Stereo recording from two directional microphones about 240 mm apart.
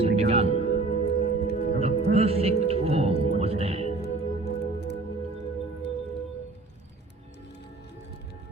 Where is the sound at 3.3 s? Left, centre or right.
Right.